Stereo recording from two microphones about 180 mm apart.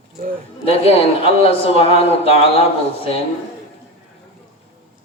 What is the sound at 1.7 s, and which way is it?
Speech, 35° left (ahead or behind).